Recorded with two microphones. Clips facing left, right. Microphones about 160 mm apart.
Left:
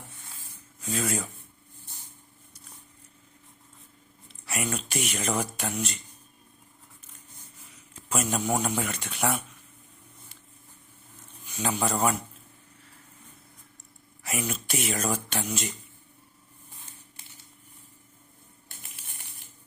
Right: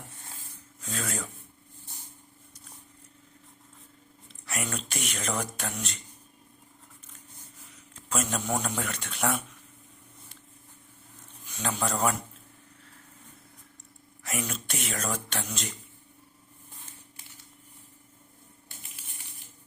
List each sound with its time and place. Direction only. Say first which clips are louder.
0.8 s speech: left 5 dB; 10° left (ahead or behind)
4.4 s speech: left 3 dB; 5° left (ahead or behind)
7.9 s speech: left 2 dB; 10° left (ahead or behind)
11.4 s a man's voice: left 3 dB; 10° left (ahead or behind)
14.3 s speech: left 2 dB; 5° left (ahead or behind)